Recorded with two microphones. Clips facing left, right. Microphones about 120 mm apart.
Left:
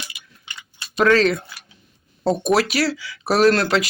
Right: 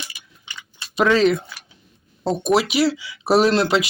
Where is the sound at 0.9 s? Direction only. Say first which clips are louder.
Even; 20° right (ahead or behind).